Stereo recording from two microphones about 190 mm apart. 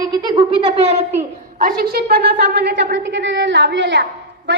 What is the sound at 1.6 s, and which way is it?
A woman's voice, 50° right (ahead or behind).